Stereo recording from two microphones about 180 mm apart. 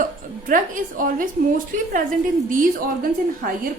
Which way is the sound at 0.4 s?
50° right (ahead or behind).